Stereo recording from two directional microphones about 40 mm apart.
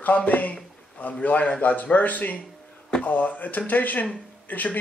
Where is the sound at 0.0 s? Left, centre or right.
Left.